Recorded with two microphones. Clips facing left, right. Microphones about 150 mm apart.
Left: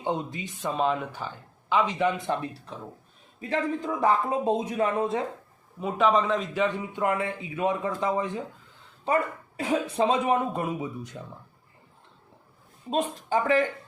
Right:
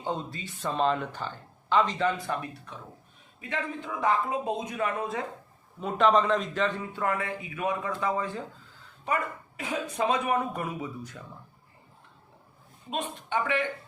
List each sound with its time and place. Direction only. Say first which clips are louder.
0.0 s speech: left 3 dB; 15° left (ahead or behind)
4.0 s speech: left 3 dB; 30° left (ahead or behind)
5.8 s speech: even; 5° left (ahead or behind)
9.0 s speech: left 5 dB; 30° left (ahead or behind)
12.9 s speech: left 5 dB; 35° left (ahead or behind)